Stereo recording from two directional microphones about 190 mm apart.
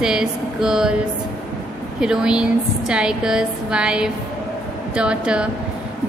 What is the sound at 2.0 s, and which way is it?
A woman's voice, 5° right (ahead or behind).